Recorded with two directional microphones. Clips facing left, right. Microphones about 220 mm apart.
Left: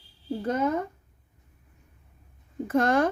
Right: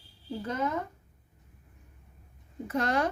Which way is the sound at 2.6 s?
50° left (ahead or behind).